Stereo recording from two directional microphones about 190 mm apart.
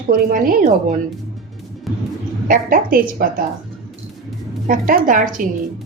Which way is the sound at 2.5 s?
45° right (ahead or behind).